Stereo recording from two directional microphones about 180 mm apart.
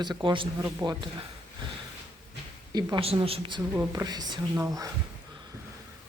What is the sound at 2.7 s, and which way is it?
Speech, 30° right (ahead or behind).